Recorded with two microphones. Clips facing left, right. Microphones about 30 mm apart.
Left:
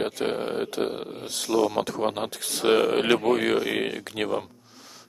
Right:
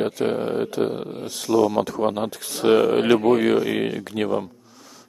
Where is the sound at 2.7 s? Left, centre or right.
Left.